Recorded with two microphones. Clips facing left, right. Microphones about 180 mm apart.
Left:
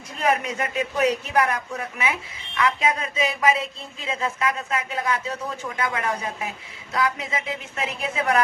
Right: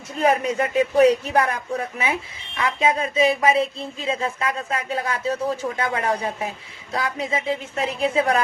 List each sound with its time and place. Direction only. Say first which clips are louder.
0.2 s speech: right 4 dB; 30° right (ahead or behind)